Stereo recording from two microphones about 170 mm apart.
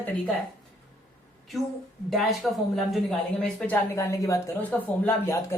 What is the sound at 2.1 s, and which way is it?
A woman's voice, centre (ahead or behind).